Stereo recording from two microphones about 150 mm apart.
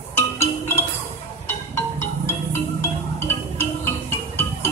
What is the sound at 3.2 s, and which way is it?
Music, 15° left (ahead or behind).